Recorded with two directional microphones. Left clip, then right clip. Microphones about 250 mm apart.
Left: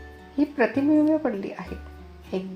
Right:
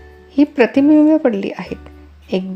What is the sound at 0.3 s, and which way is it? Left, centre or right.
Speech, right.